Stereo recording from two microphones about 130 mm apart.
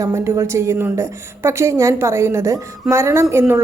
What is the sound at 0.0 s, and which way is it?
A woman's voice, 20° right (ahead or behind).